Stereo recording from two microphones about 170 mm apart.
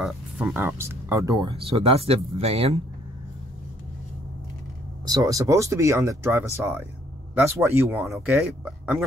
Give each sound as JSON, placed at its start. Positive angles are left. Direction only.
{"t": 0.0, "sound": "speech", "side_deg": -5}
{"t": 5.0, "sound": "speech", "side_deg": -20}